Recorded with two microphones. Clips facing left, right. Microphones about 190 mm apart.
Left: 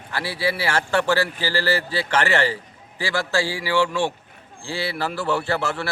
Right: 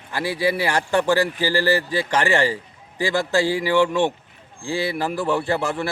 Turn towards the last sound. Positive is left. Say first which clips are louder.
# right 2 dB
turn(degrees=-15)  # may be behind; listen again after turning